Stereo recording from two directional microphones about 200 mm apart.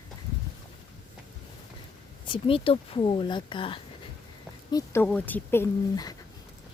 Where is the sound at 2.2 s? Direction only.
25° left (ahead or behind).